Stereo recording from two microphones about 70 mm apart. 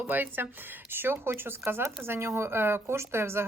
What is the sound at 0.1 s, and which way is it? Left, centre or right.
Speech, right.